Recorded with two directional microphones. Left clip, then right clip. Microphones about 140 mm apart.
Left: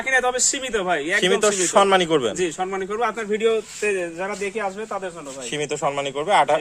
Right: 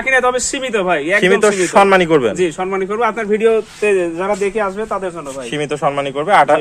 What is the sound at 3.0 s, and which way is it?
Speech, 20° right (ahead or behind).